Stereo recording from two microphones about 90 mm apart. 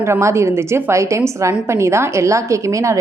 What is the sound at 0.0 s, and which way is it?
A woman's voice, 30° right (ahead or behind).